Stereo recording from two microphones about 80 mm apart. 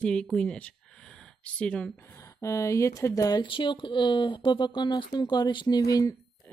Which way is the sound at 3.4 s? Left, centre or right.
Left.